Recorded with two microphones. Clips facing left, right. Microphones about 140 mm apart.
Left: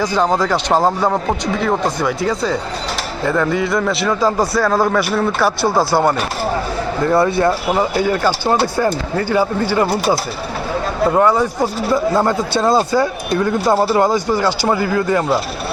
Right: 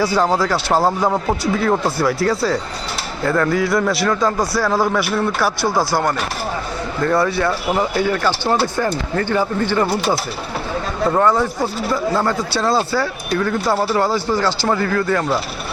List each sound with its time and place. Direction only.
0.0 s speech: 10° right (ahead or behind)
0.5 s speech: 15° left (ahead or behind)
1.1 s a man's voice: 5° left (ahead or behind)
7.0 s speech: 25° left (ahead or behind)